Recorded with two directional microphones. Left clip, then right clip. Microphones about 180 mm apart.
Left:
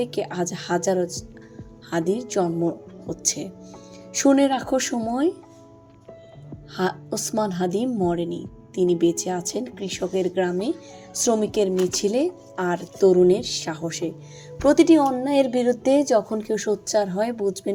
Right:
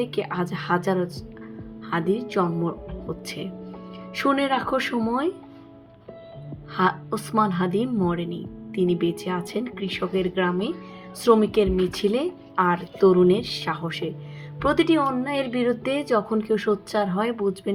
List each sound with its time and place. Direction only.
0.0 s a woman's voice: 35° left (ahead or behind)
6.7 s a woman's voice: 35° left (ahead or behind)